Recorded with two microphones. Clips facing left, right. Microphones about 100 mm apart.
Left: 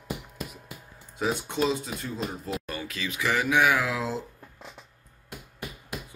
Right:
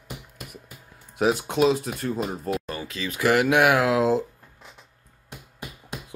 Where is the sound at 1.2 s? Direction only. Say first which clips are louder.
Right 6 dB; 85° right; by 2.2 s 65° right (ahead or behind).